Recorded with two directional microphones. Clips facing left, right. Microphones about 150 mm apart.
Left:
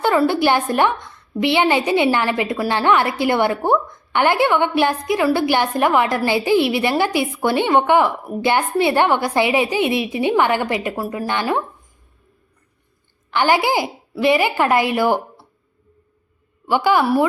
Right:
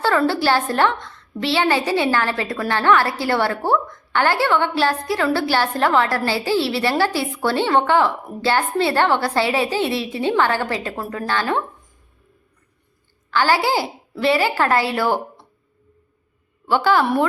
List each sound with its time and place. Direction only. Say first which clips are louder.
0.0 s a woman's voice: left 2 dB; 15° left (ahead or behind)
13.3 s a woman's voice: left 1 dB; 20° left (ahead or behind)
16.6 s a woman's voice: left 1 dB; 15° left (ahead or behind)